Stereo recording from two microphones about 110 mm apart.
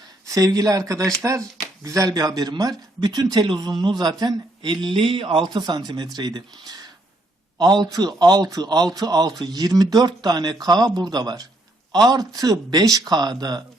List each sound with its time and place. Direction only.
0.3 s speech: 30° right (ahead or behind)